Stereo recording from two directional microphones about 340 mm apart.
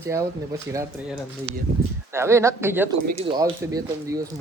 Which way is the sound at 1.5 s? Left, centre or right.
Left.